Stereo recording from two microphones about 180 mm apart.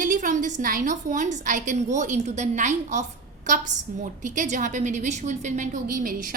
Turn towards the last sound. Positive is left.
turn(degrees=-45)  # may be behind; listen again after turning